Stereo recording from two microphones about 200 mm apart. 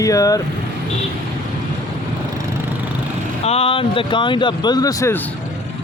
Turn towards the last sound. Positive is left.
turn(degrees=15)  # may be behind; listen again after turning